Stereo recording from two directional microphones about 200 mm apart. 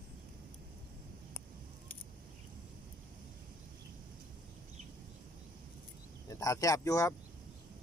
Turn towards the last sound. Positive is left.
turn(degrees=15)  # may be behind; listen again after turning